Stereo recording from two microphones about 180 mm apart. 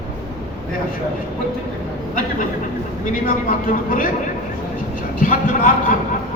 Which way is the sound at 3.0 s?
50° left (ahead or behind).